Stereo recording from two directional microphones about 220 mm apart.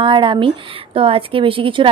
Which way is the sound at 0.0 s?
20° right (ahead or behind).